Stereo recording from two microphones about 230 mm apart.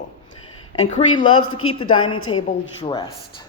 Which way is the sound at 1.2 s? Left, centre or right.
Left.